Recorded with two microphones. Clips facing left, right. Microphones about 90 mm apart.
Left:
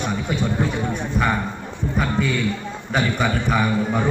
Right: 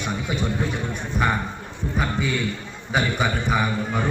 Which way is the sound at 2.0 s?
5° right (ahead or behind).